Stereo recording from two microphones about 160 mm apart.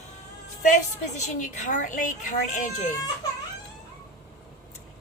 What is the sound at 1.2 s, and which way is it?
Speech, 50° left (ahead or behind).